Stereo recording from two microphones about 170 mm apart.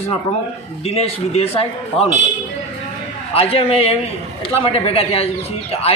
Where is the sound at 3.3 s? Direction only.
35° left (ahead or behind).